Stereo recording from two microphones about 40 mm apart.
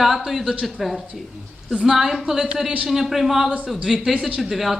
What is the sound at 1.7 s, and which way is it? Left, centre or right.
A woman's voice, centre.